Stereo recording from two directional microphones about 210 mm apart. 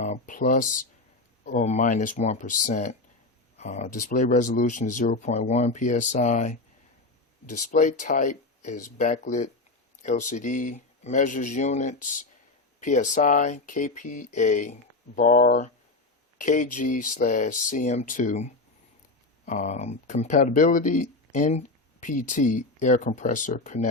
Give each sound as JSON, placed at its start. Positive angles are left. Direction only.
{"t": 0.0, "sound": "speech", "side_deg": 35}